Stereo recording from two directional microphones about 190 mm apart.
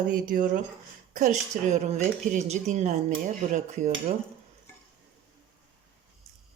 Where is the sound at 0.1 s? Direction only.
45° right (ahead or behind).